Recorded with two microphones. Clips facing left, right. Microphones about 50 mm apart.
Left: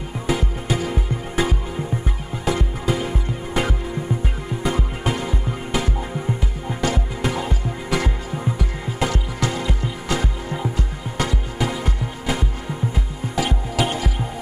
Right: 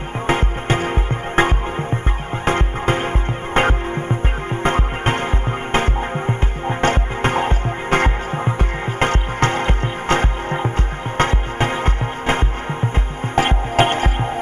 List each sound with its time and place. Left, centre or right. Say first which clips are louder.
0.3 s music: right 4 dB; right